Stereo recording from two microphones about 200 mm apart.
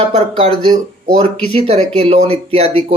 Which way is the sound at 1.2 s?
35° right (ahead or behind).